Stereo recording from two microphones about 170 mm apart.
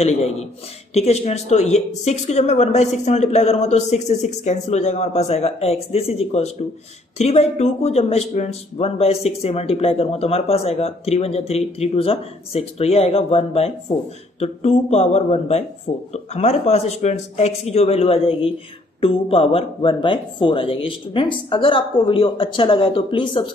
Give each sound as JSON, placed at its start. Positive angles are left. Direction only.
{"t": 0.0, "sound": "speech", "side_deg": 40}